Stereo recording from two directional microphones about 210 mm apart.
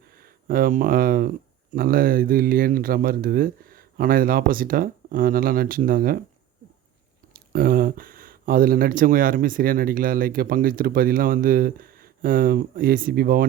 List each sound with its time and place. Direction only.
0.1 s speech: 45° right (ahead or behind)
7.3 s speech: 45° right (ahead or behind)